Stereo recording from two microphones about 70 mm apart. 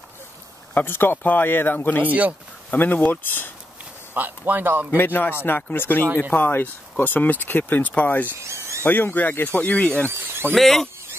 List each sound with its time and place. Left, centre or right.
0.7 s speech: left
2.0 s speech: right
2.7 s speech: left
4.1 s speech: right
4.9 s speech: left
8.4 s a sound: right
8.8 s speech: left
10.0 s a sound: right
10.5 s speech: centre